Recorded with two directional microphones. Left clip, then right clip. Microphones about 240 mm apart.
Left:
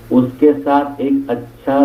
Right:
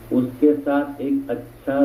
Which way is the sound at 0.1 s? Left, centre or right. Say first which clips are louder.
Left 6 dB; left.